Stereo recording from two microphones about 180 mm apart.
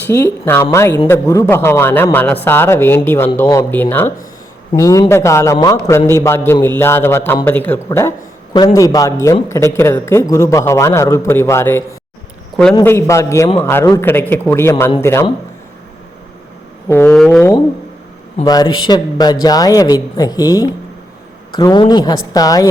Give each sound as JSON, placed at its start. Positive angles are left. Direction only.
{"t": 0.1, "sound": "speech", "side_deg": 10}
{"t": 16.9, "sound": "speech", "side_deg": 15}
{"t": 17.2, "sound": "a sound", "side_deg": 0}
{"t": 18.4, "sound": "speech", "side_deg": 20}